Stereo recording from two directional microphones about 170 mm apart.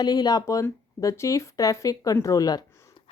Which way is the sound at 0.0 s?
25° left (ahead or behind).